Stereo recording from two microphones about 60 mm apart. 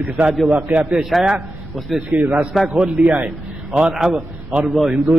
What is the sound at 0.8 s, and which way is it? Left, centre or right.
A man's voice, centre.